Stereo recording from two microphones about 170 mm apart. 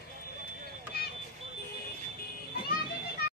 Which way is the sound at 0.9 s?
65° left (ahead or behind).